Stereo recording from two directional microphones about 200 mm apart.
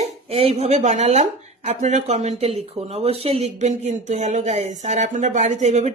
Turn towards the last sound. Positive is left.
turn(degrees=-35)  # may be behind; listen again after turning